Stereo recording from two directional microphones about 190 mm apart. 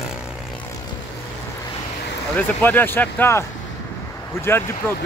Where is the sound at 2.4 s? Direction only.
10° left (ahead or behind).